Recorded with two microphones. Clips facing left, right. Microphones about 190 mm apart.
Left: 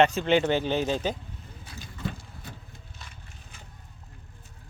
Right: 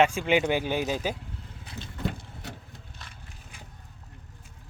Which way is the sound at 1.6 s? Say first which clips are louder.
Right 4 dB; 25° right (ahead or behind).